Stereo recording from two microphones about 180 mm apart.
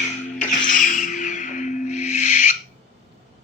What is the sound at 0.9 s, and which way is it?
Music, 45° left (ahead or behind).